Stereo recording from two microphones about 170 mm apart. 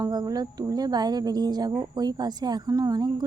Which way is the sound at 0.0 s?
20° right (ahead or behind).